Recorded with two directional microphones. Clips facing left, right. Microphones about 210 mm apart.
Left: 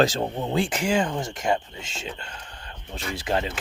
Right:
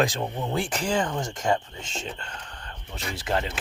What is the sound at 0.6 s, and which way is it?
Speech, 10° left (ahead or behind).